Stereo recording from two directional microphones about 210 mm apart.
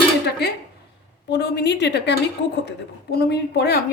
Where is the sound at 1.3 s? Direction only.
50° left (ahead or behind).